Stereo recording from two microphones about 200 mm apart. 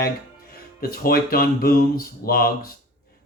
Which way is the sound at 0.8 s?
50° left (ahead or behind).